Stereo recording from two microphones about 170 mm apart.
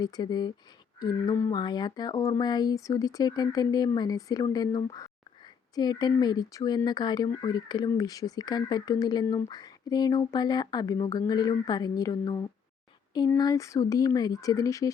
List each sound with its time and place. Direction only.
0.0 s speech: 25° left (ahead or behind)